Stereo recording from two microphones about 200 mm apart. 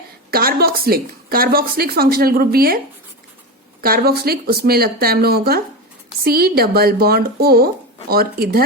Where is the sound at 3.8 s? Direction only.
50° right (ahead or behind).